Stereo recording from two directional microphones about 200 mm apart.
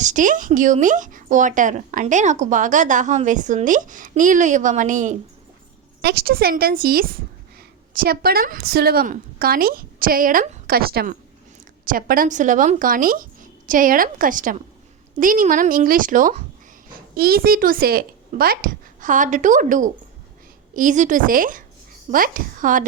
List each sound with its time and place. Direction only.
0.0 s speech: 40° right (ahead or behind)
6.0 s a woman's voice: 50° right (ahead or behind)